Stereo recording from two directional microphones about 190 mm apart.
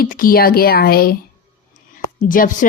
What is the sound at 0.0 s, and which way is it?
Speech, 50° left (ahead or behind).